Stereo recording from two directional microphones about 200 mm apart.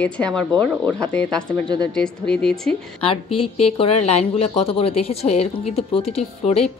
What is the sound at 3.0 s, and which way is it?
A woman's voice, 25° left (ahead or behind).